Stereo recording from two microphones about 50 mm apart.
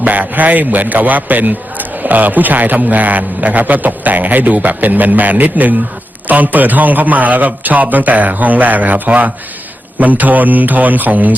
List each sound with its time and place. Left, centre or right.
0.0 s a man's voice: right